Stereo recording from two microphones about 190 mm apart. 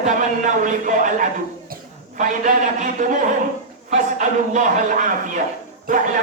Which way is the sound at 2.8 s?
45° right (ahead or behind).